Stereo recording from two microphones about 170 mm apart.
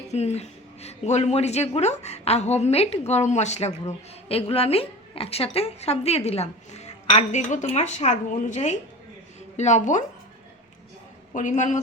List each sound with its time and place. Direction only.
0.1 s a woman's voice: 40° left (ahead or behind)
11.3 s a woman's voice: 45° left (ahead or behind)